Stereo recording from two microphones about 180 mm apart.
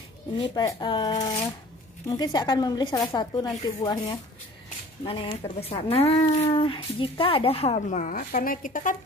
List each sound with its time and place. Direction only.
0.4 s speech: 25° left (ahead or behind)
5.0 s speech: 30° left (ahead or behind); by 8.9 s 50° left (ahead or behind)